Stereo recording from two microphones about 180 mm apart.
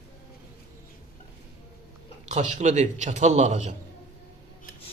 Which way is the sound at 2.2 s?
40° right (ahead or behind).